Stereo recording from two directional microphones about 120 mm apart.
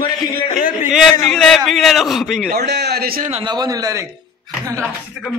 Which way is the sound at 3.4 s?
35° right (ahead or behind).